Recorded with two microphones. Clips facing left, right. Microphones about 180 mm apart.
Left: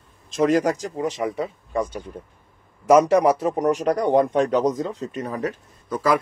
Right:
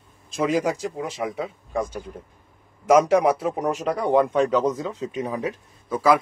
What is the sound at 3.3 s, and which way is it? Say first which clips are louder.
Speech: left 4 dB; 40° left (ahead or behind).